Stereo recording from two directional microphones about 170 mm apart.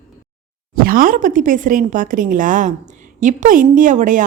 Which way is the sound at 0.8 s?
55° right (ahead or behind).